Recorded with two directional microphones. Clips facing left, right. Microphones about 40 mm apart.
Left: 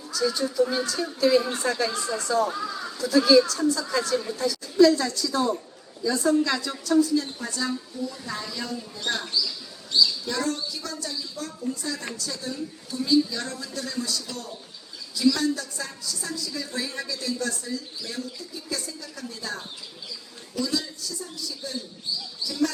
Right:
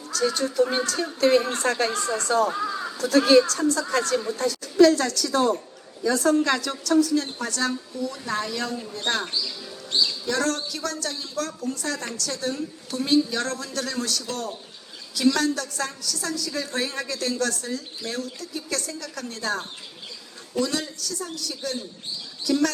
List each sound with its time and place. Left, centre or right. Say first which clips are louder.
0.1 s a woman's voice: right 1 dB; right
9.9 s speech: left 2 dB; right
10.2 s a woman's voice: right 3 dB; right
22.0 s bird: left 3 dB; right
22.4 s a woman's voice: right 4 dB; right